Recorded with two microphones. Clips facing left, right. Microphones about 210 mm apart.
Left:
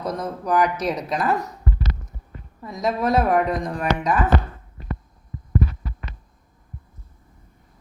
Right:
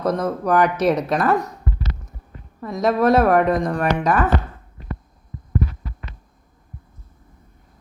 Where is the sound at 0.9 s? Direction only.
50° right (ahead or behind).